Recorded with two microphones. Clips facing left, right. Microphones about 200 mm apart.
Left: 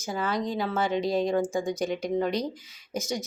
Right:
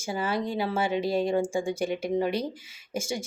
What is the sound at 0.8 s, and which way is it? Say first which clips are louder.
Speech: left 1 dB; 5° right (ahead or behind).